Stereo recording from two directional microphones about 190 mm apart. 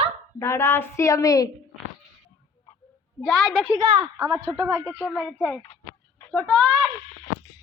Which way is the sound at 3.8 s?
20° right (ahead or behind).